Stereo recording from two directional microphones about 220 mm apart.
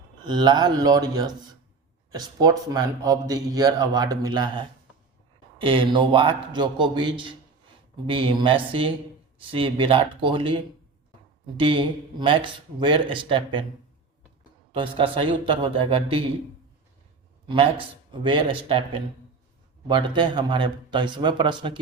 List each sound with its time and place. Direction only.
0.3 s speech: 20° right (ahead or behind)
14.7 s speech: 25° right (ahead or behind)
17.5 s speech: 25° right (ahead or behind)